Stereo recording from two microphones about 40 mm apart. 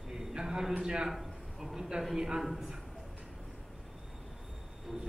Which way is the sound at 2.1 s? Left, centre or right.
Centre.